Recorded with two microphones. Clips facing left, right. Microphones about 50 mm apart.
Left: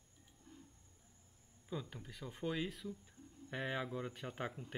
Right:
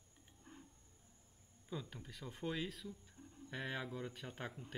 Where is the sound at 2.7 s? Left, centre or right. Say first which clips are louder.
Left 3 dB; left.